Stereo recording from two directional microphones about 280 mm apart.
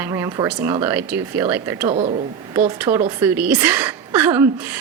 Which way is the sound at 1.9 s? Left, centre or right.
Right.